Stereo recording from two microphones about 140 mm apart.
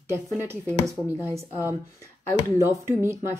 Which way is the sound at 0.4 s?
20° right (ahead or behind).